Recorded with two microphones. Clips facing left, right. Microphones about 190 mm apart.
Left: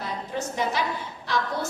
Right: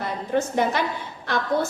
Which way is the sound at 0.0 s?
55° right (ahead or behind).